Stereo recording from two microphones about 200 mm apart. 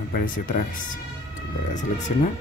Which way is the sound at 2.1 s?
35° left (ahead or behind).